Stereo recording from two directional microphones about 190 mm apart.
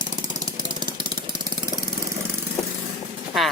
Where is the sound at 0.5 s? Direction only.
25° right (ahead or behind).